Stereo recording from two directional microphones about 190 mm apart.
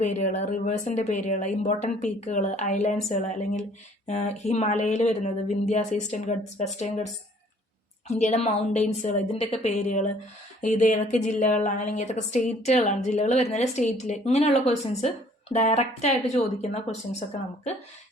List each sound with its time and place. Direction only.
0.0 s a woman's voice: 40° left (ahead or behind)